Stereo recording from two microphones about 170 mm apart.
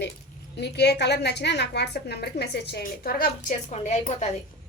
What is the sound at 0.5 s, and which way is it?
A woman's voice, 80° left.